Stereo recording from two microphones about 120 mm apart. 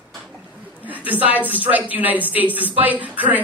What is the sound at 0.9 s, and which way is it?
Speech, 15° right (ahead or behind).